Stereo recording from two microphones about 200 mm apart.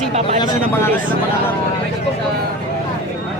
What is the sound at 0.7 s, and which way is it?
Speech, 10° left (ahead or behind).